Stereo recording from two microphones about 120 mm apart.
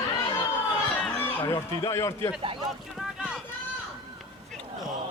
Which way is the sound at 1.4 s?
25° left (ahead or behind).